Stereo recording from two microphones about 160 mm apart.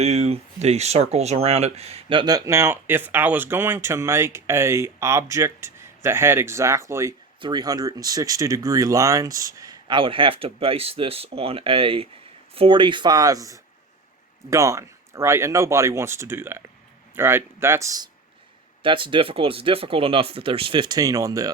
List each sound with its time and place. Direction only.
0.0 s speech: 40° right (ahead or behind); by 18.1 s 20° right (ahead or behind)
18.8 s speech: 30° right (ahead or behind)